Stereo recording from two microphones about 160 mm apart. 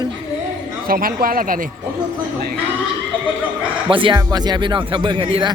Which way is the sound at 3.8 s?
30° right (ahead or behind).